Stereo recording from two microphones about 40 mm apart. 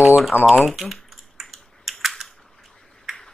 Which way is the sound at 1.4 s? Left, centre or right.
Centre.